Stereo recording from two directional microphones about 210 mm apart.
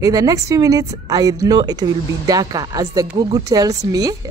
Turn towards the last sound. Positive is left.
turn(degrees=-15)  # may be behind; listen again after turning